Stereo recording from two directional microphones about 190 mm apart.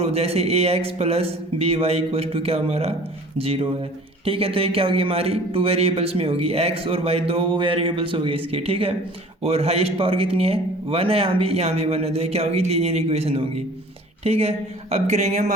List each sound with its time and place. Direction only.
0.0 s a man's voice: 30° right (ahead or behind)